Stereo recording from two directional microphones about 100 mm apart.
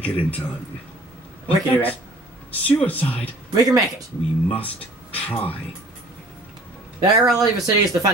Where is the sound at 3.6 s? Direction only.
35° right (ahead or behind).